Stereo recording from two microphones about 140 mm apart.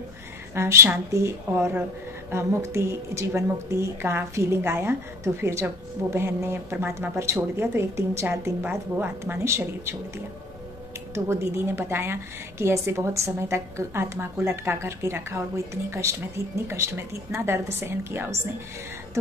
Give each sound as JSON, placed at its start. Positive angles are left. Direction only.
{"t": 0.6, "sound": "a woman's voice", "side_deg": -20}